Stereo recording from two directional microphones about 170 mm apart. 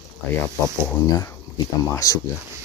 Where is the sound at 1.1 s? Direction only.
20° left (ahead or behind).